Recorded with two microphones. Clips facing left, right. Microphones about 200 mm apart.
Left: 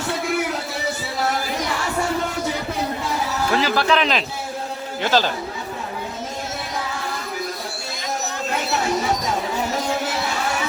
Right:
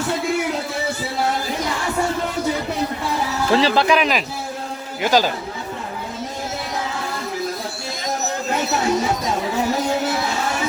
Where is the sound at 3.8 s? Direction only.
10° right (ahead or behind).